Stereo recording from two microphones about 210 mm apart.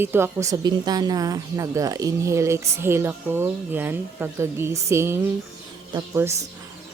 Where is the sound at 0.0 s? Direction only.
10° right (ahead or behind).